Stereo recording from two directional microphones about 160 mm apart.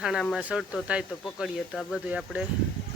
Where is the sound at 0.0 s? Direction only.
5° right (ahead or behind).